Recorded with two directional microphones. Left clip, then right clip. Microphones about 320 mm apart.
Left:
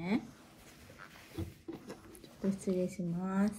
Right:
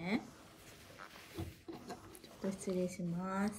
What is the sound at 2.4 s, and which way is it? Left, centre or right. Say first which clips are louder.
Speech: left 4 dB; centre.